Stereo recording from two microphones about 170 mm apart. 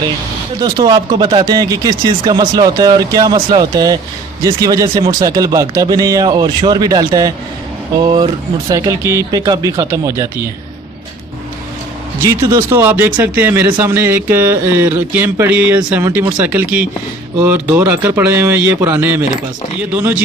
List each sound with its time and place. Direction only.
0.6 s speech: 25° right (ahead or behind)
12.2 s speech: 15° right (ahead or behind)